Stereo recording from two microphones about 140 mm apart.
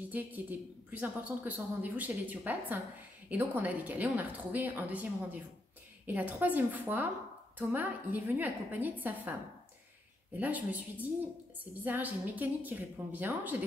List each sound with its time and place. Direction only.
0.1 s a woman's voice: 15° right (ahead or behind)
10.3 s a woman's voice: 10° right (ahead or behind)